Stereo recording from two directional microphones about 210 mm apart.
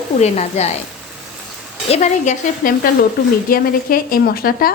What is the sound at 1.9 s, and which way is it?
Speech, 35° left (ahead or behind).